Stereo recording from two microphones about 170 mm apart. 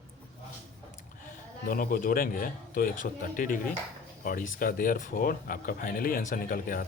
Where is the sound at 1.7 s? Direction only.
55° left (ahead or behind).